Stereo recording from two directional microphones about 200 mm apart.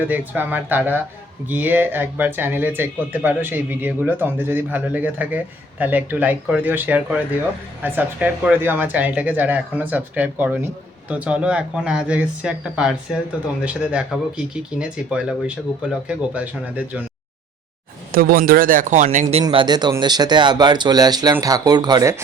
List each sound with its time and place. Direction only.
0.0 s speech: 10° right (ahead or behind)
18.1 s speech: 45° right (ahead or behind); by 22.2 s 15° right (ahead or behind)